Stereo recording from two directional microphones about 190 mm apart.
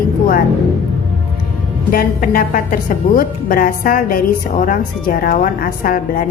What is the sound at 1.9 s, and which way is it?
A woman's voice, 45° left (ahead or behind).